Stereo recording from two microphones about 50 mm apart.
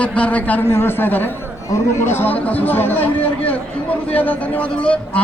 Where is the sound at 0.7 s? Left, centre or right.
Left.